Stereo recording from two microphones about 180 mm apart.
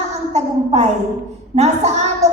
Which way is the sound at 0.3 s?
40° right (ahead or behind).